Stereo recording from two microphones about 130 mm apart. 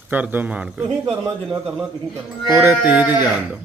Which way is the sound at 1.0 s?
25° right (ahead or behind).